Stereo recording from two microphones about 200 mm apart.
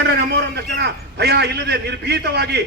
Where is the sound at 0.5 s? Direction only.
55° right (ahead or behind).